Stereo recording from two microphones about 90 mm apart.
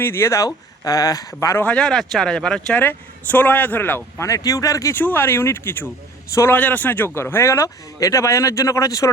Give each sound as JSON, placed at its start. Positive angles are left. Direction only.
{"t": 0.0, "sound": "a man's voice", "side_deg": 25}
{"t": 1.6, "sound": "speech", "side_deg": 10}
{"t": 3.3, "sound": "speech", "side_deg": 20}
{"t": 4.3, "sound": "a man's voice", "side_deg": 40}
{"t": 4.9, "sound": "a man's voice", "side_deg": 25}